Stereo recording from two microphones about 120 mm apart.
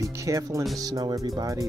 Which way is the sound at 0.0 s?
25° right (ahead or behind).